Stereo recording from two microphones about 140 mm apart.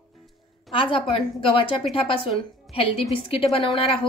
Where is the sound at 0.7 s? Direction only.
40° left (ahead or behind).